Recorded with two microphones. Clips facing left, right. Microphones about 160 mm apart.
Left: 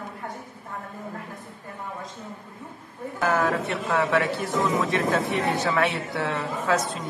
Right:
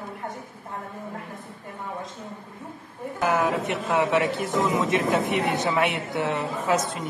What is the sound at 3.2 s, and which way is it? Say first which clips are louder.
Speech: even; 15° right (ahead or behind).